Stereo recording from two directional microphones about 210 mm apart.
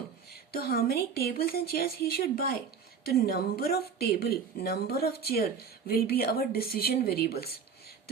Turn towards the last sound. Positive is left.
turn(degrees=45)  # may be behind; listen again after turning